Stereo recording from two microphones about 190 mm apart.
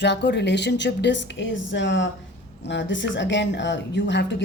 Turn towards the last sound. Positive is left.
turn(degrees=65)  # may be behind; listen again after turning